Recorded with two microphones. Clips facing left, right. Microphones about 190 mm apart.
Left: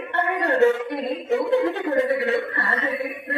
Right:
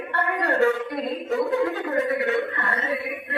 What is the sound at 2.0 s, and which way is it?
Chuckle, 30° left (ahead or behind).